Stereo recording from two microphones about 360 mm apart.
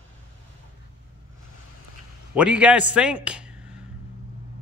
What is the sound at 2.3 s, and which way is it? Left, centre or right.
A man's voice, centre.